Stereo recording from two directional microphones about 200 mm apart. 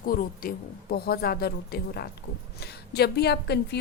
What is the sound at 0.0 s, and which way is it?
A woman's voice, 45° left (ahead or behind).